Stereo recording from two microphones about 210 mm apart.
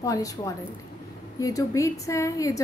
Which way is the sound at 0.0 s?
15° left (ahead or behind).